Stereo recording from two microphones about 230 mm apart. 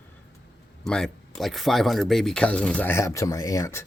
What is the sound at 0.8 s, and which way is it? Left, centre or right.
Speech, centre.